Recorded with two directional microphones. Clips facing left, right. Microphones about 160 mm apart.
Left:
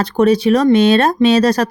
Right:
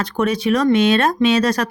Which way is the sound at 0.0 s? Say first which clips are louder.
Left 7 dB; 35° left (ahead or behind).